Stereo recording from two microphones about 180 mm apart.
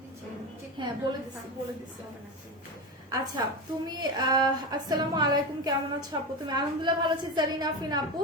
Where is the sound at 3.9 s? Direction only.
25° right (ahead or behind).